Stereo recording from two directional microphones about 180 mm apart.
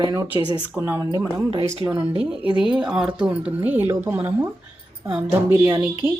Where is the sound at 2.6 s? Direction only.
5° right (ahead or behind).